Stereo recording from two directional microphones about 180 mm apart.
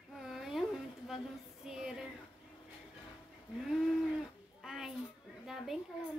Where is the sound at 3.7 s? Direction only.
Centre (ahead or behind).